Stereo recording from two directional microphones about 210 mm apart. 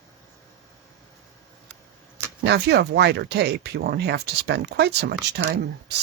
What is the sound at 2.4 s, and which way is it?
Speech, 55° right (ahead or behind).